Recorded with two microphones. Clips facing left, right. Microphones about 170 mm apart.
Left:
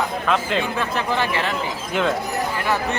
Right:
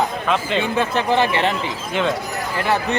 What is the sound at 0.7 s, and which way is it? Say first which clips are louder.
Speech: right 5 dB; 30° right (ahead or behind).